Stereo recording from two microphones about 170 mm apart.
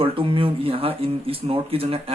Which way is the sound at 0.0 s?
30° right (ahead or behind).